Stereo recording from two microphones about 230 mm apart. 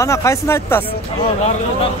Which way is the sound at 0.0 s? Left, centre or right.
Centre.